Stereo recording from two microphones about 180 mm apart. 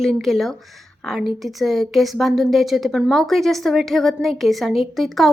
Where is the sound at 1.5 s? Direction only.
Centre (ahead or behind).